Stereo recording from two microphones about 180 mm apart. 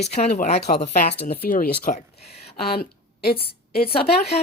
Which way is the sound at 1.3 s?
55° left (ahead or behind).